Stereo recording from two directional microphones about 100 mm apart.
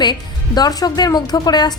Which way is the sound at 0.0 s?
45° left (ahead or behind).